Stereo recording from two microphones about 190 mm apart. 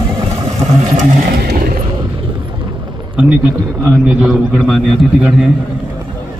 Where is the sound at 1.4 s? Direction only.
50° right (ahead or behind).